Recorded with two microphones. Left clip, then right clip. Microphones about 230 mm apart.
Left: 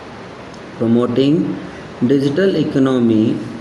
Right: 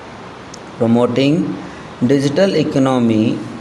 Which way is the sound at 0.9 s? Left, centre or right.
Right.